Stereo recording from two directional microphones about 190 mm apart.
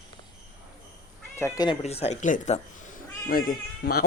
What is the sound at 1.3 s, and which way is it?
Speech, 15° left (ahead or behind).